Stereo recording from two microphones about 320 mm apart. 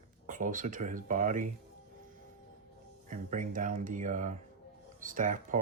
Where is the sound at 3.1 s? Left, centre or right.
Right.